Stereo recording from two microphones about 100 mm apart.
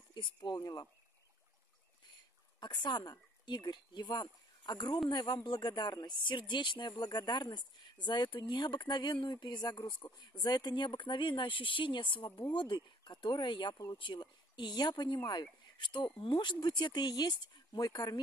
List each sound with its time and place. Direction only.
0.1 s speech: 45° left (ahead or behind)
2.6 s speech: 50° left (ahead or behind)
15.6 s a sound: 50° left (ahead or behind)
16.2 s speech: 55° left (ahead or behind)